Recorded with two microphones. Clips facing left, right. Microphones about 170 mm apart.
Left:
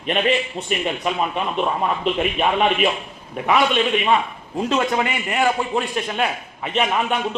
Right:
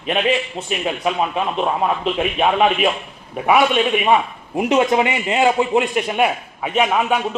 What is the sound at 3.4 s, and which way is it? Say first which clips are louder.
A man's voice: right 3 dB; 10° right (ahead or behind).